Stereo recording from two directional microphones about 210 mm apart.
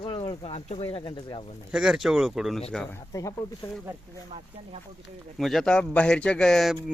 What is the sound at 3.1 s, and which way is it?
Speech, 15° left (ahead or behind).